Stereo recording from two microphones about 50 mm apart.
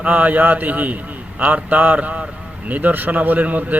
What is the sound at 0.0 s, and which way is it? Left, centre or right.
A man's voice, right.